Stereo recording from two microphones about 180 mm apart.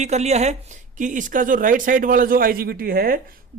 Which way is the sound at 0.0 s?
40° right (ahead or behind).